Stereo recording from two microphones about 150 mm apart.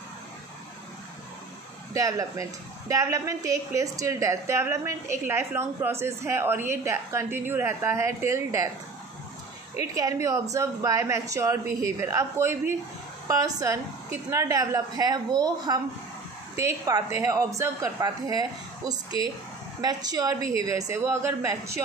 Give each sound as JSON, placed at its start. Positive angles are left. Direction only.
{"t": 2.0, "sound": "a woman's voice", "side_deg": -25}
{"t": 9.8, "sound": "a woman's voice", "side_deg": -20}